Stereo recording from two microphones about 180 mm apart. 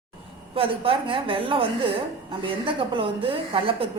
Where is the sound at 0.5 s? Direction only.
30° right (ahead or behind).